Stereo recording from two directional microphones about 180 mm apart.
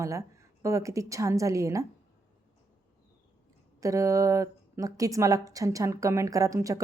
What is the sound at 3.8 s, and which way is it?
Speech, 15° right (ahead or behind).